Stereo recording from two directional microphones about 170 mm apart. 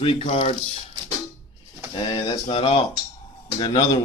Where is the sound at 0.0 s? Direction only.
35° left (ahead or behind).